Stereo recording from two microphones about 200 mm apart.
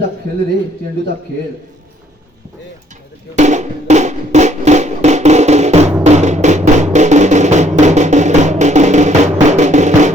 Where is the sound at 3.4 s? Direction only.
35° right (ahead or behind).